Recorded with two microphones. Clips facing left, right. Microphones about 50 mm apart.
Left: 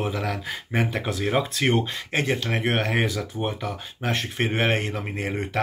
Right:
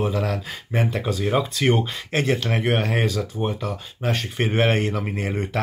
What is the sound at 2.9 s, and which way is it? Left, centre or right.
Speech, centre.